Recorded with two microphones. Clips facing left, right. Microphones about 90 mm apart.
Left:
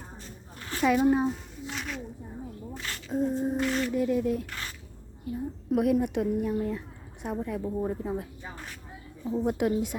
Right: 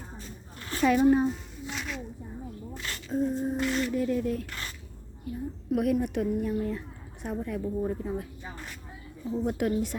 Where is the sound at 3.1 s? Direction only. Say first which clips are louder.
Left 1 dB; 20° left (ahead or behind).